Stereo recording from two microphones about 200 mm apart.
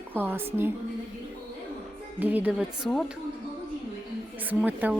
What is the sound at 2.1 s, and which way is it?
Speech, 10° right (ahead or behind).